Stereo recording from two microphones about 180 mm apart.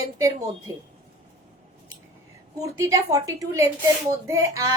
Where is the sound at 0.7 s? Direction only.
20° right (ahead or behind).